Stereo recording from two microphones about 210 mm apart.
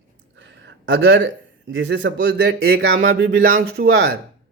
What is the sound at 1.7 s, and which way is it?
Speech, 60° right (ahead or behind).